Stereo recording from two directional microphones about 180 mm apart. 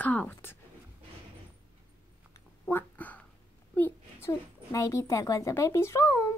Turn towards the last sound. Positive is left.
turn(degrees=15)  # may be behind; listen again after turning